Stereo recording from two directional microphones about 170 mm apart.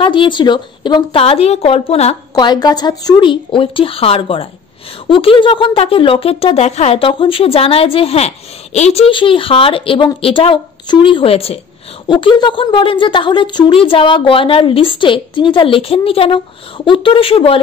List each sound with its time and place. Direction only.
0.0 s speech: 30° left (ahead or behind)
2.3 s a woman's voice: 25° left (ahead or behind)